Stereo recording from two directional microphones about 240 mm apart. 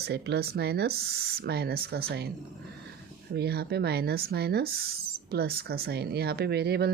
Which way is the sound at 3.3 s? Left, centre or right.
Right.